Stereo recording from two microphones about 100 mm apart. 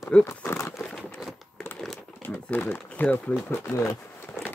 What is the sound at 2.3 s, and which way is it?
Speech, 15° left (ahead or behind).